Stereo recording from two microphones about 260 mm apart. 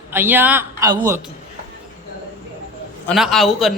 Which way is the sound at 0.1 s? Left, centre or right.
Centre.